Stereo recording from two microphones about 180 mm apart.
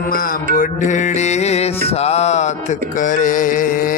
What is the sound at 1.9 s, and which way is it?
Mantra, 35° left (ahead or behind).